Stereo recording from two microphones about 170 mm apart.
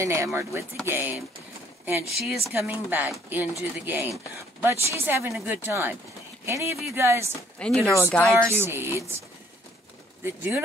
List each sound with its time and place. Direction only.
0.0 s speech: 15° right (ahead or behind)
7.5 s speech: 5° left (ahead or behind)
8.6 s speech: 15° right (ahead or behind)
10.2 s speech: 15° right (ahead or behind)